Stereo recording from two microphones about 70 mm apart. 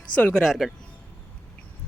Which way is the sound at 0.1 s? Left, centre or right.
Centre.